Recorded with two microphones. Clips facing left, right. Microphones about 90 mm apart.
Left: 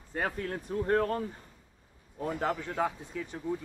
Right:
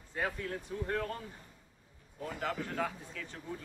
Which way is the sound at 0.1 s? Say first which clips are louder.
Left 3 dB; 50° left (ahead or behind).